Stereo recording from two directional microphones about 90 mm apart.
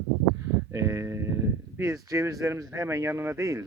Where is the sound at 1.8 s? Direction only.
35° right (ahead or behind).